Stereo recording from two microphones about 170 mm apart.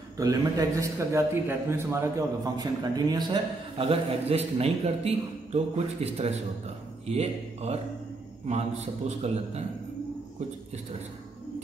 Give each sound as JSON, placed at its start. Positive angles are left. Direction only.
{"t": 0.2, "sound": "a man's voice", "side_deg": -20}